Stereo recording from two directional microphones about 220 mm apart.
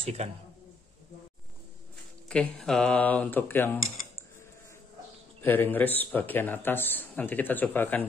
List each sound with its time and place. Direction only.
0.0 s a man's voice: 25° right (ahead or behind)
2.2 s a man's voice: 5° left (ahead or behind)
5.4 s a man's voice: 10° left (ahead or behind)